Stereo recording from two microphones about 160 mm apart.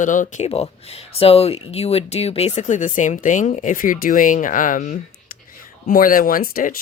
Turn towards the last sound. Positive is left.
turn(degrees=65)  # may be behind; listen again after turning